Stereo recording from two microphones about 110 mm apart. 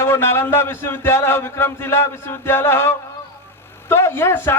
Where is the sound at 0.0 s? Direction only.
20° left (ahead or behind).